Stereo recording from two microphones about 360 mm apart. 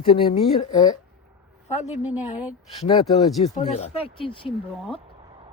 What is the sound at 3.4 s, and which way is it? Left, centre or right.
Speech, centre.